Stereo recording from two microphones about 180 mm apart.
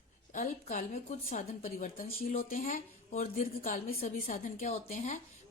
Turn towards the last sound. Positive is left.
turn(degrees=40)  # may be behind; listen again after turning